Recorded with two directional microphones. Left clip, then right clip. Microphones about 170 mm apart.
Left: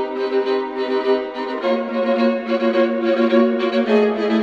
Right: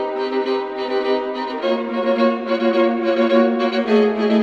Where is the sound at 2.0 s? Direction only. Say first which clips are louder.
Right 2 dB; 20° right (ahead or behind).